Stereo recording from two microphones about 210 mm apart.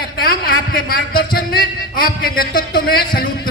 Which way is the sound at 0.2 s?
45° left (ahead or behind).